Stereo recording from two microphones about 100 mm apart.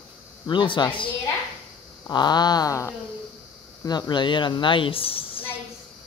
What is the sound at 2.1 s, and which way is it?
Speech, 45° left (ahead or behind).